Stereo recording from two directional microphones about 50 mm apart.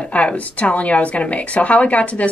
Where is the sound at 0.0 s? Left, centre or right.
Left.